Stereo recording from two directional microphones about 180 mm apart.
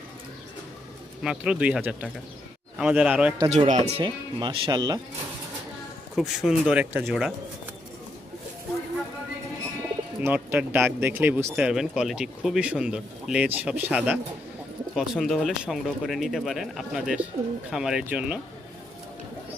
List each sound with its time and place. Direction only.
1.2 s speech: 5° right (ahead or behind)
3.5 s speech: 40° right (ahead or behind); by 4.9 s 25° right (ahead or behind)
6.1 s speech: centre (ahead or behind)
10.2 s speech: 10° right (ahead or behind)